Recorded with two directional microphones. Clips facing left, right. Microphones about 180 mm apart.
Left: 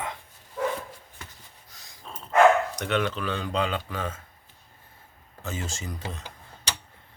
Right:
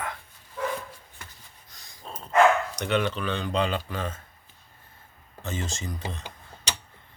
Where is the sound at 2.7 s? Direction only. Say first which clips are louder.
Right 1 dB; centre (ahead or behind).